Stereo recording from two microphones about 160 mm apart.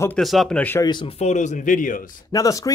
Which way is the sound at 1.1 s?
45° left (ahead or behind).